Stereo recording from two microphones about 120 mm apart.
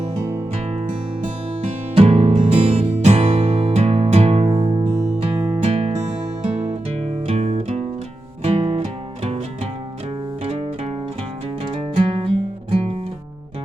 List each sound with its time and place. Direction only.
0.5 s music: 60° right (ahead or behind)
2.0 s music: 60° right (ahead or behind)
4.4 s music: 40° right (ahead or behind)
6.4 s music: 70° right (ahead or behind)
8.4 s music: 55° right (ahead or behind)
10.4 s music: 60° right (ahead or behind)
11.6 s music: 50° right (ahead or behind)